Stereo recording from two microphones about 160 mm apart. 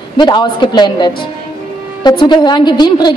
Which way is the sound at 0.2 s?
30° left (ahead or behind).